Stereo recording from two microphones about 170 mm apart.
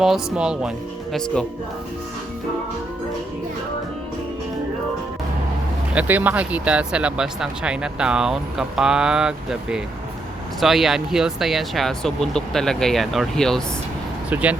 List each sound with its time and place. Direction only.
0.0 s speech: 5° right (ahead or behind)
5.9 s speech: 10° right (ahead or behind)
14.3 s speech: 10° right (ahead or behind)